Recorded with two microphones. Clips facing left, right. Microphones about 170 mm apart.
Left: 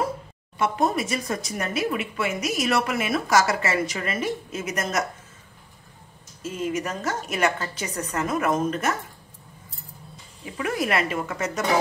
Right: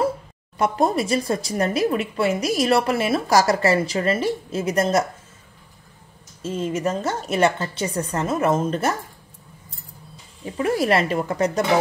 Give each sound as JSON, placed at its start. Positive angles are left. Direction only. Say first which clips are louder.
{"t": 0.6, "sound": "speech", "louder": "right 3 dB", "side_deg": -35}
{"t": 6.4, "sound": "a woman's voice", "louder": "right 4 dB", "side_deg": -30}
{"t": 10.4, "sound": "speech", "louder": "right 5 dB", "side_deg": -35}